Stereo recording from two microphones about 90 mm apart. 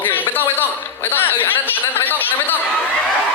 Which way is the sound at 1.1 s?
20° left (ahead or behind).